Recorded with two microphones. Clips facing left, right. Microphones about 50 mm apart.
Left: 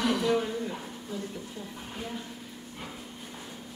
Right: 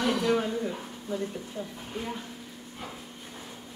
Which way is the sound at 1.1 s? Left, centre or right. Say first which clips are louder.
Right 5 dB; right.